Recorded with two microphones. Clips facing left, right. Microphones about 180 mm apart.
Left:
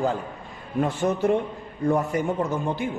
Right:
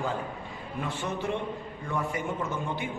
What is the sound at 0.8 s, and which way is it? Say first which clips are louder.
A man's voice: left 10 dB; 45° left (ahead or behind).